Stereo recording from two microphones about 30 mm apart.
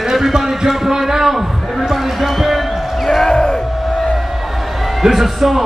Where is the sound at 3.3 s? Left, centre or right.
Left.